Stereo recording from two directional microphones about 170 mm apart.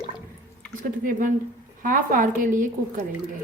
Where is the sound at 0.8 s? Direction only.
50° right (ahead or behind).